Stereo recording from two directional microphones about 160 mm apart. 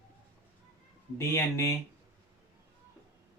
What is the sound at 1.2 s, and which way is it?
Speech, 15° left (ahead or behind).